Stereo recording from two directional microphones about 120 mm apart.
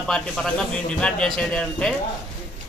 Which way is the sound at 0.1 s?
5° left (ahead or behind).